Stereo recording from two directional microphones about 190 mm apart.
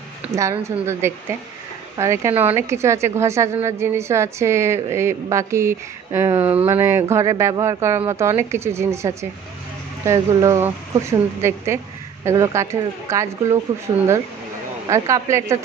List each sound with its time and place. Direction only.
0.3 s a woman's voice: 15° right (ahead or behind)